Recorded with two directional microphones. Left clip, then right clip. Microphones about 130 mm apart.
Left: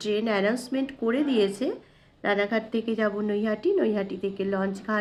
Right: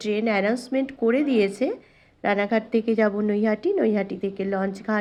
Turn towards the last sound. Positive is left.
turn(degrees=-25)  # may be behind; listen again after turning